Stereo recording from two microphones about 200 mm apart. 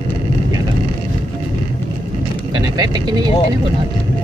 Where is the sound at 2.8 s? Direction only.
20° right (ahead or behind).